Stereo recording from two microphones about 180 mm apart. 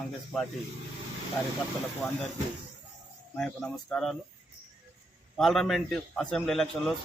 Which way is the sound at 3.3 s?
5° left (ahead or behind).